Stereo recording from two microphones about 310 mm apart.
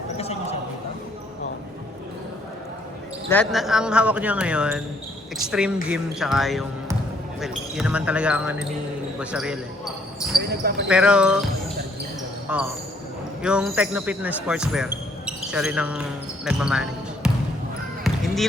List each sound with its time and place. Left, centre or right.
0.2 s a sound: centre
3.2 s speech: centre
10.5 s basketball bounce: right
10.8 s speech: centre
12.5 s speech: centre